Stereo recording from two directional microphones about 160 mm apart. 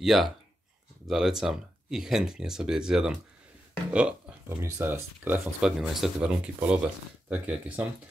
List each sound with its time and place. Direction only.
0.0 s speech: centre (ahead or behind)